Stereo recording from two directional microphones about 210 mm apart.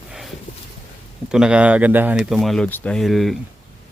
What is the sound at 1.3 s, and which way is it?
Speech, 5° right (ahead or behind).